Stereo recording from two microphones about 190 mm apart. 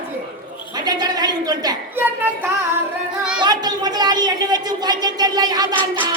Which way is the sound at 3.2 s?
5° right (ahead or behind).